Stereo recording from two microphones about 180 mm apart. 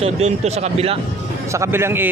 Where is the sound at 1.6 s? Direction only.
15° right (ahead or behind).